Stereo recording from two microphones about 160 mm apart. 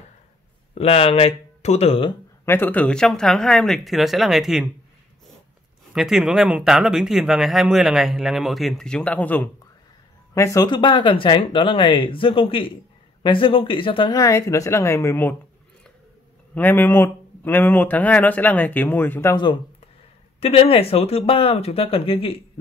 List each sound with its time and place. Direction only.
0.7 s speech: 35° left (ahead or behind)
2.4 s speech: 10° left (ahead or behind)
5.9 s speech: centre (ahead or behind); by 15.3 s 15° left (ahead or behind)
16.5 s speech: 10° left (ahead or behind)
19.3 s speech: 30° left (ahead or behind)